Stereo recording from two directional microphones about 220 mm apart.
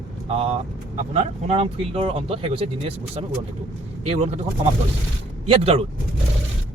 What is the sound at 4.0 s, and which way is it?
Speech, 30° right (ahead or behind).